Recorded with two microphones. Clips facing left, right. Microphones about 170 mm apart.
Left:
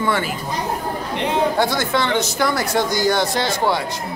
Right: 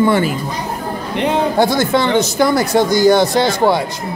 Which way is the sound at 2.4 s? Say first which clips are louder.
Right 7 dB; 20° right (ahead or behind).